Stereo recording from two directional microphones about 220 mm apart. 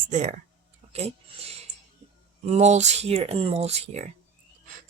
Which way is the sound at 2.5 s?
30° right (ahead or behind).